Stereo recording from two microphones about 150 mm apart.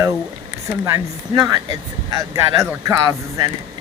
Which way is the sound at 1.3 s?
25° right (ahead or behind).